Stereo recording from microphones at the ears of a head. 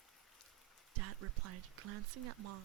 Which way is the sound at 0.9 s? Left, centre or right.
Right.